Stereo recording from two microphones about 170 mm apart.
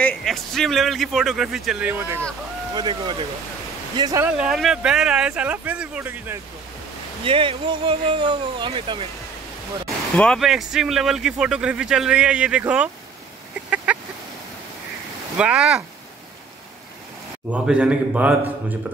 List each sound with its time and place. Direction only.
0.0 s speech: centre (ahead or behind)
2.7 s speech: 25° right (ahead or behind)
4.4 s speech: centre (ahead or behind)
7.2 s speech: 30° right (ahead or behind)
10.1 s speech: 5° left (ahead or behind)
13.9 s a sound: 5° right (ahead or behind)
15.3 s speech: 5° right (ahead or behind)
17.5 s a man's voice: 5° right (ahead or behind)